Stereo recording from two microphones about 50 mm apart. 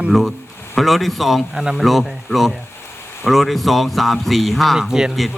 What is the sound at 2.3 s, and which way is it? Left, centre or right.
Speech, left.